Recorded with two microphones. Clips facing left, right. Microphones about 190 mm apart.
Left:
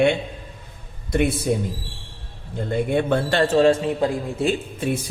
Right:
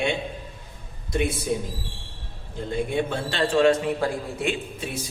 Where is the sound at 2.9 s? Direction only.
55° left (ahead or behind); by 4.5 s 25° left (ahead or behind).